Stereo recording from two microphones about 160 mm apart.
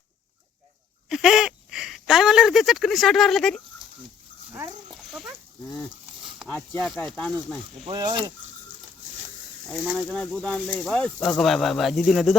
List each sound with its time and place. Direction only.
1.1 s speech: 5° right (ahead or behind)
4.9 s dog: 5° right (ahead or behind)
6.5 s speech: 5° left (ahead or behind)
7.9 s speech: 30° right (ahead or behind)
9.6 s speech: centre (ahead or behind)